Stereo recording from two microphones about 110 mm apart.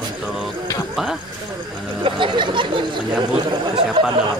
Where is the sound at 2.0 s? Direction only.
45° right (ahead or behind).